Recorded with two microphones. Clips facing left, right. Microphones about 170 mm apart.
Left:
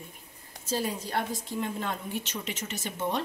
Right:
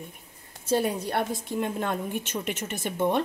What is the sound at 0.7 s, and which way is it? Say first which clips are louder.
Speech: right 5 dB; 60° right (ahead or behind).